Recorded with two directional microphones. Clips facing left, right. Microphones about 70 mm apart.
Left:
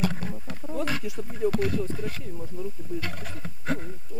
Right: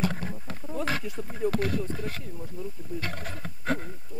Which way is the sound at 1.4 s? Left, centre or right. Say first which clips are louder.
Left 2 dB; centre.